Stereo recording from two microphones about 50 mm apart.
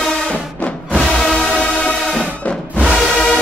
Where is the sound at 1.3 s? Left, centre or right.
Left.